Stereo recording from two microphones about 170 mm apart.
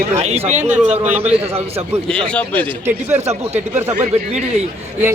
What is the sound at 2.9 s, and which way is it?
Speech, 10° right (ahead or behind).